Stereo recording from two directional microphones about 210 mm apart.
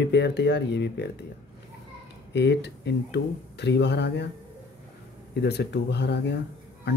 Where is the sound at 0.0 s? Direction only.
55° left (ahead or behind).